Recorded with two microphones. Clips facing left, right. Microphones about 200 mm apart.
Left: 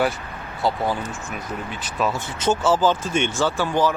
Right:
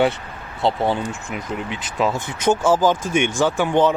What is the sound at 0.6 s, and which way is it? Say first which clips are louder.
Speech: right 3 dB; 25° right (ahead or behind).